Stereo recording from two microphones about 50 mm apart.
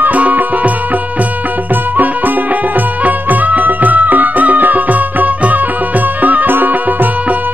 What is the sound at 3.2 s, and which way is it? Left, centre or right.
Music, right.